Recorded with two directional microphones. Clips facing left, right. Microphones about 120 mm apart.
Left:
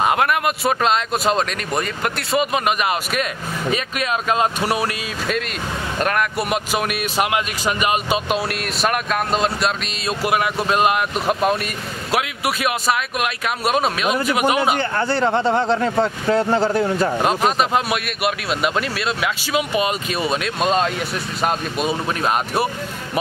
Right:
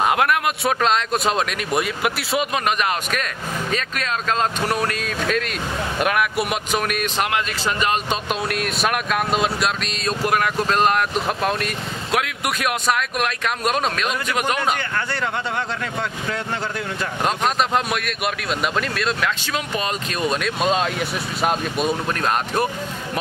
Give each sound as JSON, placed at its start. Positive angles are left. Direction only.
{"t": 0.0, "sound": "speech", "side_deg": 0}
{"t": 5.9, "sound": "speech", "side_deg": -5}
{"t": 14.8, "sound": "speech", "side_deg": 30}
{"t": 17.2, "sound": "speech", "side_deg": 5}